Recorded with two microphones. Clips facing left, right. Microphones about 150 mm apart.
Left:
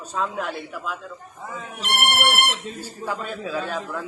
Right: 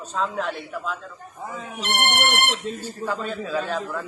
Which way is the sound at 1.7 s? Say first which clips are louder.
Even; 10° left (ahead or behind).